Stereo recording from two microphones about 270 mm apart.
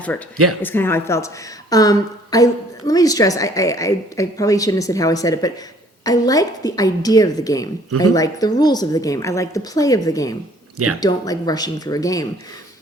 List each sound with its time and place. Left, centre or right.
0.6 s a woman's voice: centre